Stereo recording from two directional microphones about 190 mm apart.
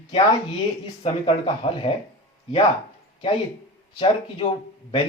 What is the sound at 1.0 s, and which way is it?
Speech, 30° left (ahead or behind).